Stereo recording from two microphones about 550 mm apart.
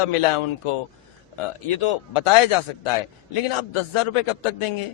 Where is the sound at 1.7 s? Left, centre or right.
Left.